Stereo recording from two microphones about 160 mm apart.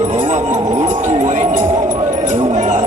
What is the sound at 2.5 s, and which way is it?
Speech, 50° right (ahead or behind).